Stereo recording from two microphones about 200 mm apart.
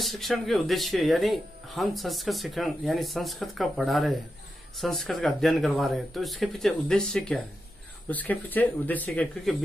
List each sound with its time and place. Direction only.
0.0 s speech: centre (ahead or behind)